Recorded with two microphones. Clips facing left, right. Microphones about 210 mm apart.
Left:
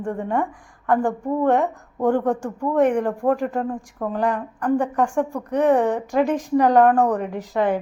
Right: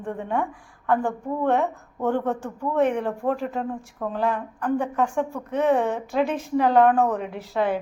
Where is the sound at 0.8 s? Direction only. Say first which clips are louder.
Left 3 dB; 15° left (ahead or behind).